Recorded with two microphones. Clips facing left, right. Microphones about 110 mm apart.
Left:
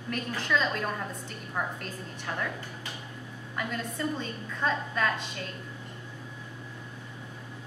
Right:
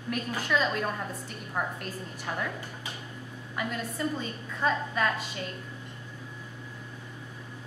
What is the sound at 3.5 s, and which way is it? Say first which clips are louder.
A woman's voice: right 1 dB; 5° right (ahead or behind).